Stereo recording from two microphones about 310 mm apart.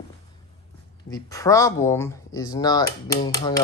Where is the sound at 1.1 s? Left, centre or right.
Centre.